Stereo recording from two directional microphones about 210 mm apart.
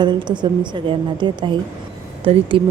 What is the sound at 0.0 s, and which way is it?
A woman's voice, 20° right (ahead or behind).